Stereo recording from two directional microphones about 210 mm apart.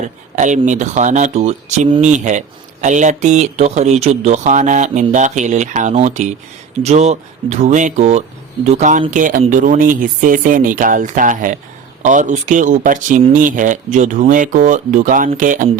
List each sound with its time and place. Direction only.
0.3 s speech: 35° right (ahead or behind)